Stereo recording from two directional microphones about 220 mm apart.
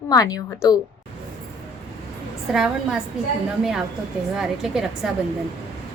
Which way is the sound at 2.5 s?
Centre (ahead or behind).